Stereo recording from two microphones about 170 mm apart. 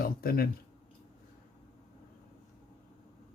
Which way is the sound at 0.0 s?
60° left (ahead or behind).